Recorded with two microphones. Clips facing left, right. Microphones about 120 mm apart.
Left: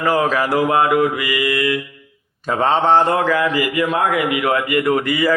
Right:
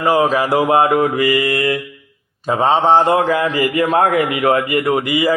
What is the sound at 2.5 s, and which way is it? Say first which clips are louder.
Speech: right 2 dB; 15° right (ahead or behind).